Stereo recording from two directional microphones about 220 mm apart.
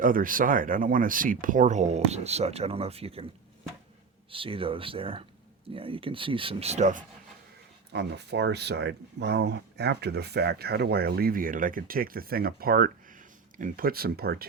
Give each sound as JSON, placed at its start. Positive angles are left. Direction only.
{"t": 0.0, "sound": "speech", "side_deg": -40}
{"t": 4.3, "sound": "speech", "side_deg": -25}
{"t": 7.9, "sound": "speech", "side_deg": -50}